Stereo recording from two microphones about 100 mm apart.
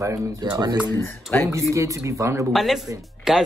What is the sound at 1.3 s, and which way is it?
Speech, 15° left (ahead or behind).